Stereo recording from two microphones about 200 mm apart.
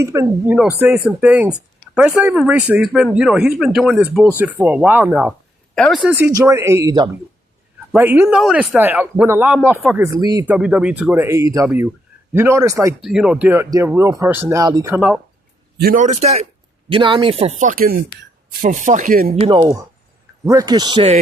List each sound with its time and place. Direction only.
0.0 s speech: 15° right (ahead or behind)
5.7 s speech: centre (ahead or behind); by 12.9 s 15° right (ahead or behind)
13.0 s speech: 5° right (ahead or behind)
15.8 s a man's voice: 45° right (ahead or behind); by 17.5 s 25° right (ahead or behind)
17.6 s a man's voice: 45° right (ahead or behind)
19.5 s a man's voice: 20° right (ahead or behind)